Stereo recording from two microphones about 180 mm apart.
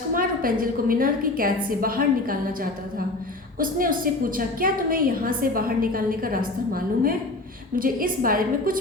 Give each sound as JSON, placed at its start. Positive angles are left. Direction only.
{"t": 0.1, "sound": "a woman's voice", "side_deg": -50}